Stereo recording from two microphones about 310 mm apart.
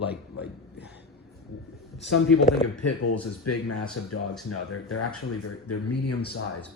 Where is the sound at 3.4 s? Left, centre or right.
Left.